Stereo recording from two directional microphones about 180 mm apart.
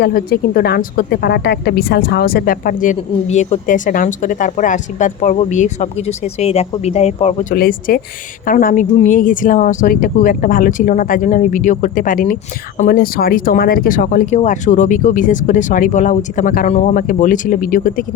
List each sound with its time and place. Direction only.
0.0 s a woman's voice: 55° left (ahead or behind); by 7.4 s 35° left (ahead or behind)
7.5 s a woman's voice: 50° left (ahead or behind)